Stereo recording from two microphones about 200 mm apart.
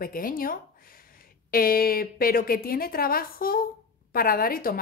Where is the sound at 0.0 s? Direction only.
45° left (ahead or behind).